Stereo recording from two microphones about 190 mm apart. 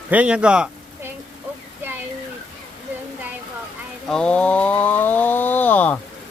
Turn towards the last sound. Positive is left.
turn(degrees=10)  # may be behind; listen again after turning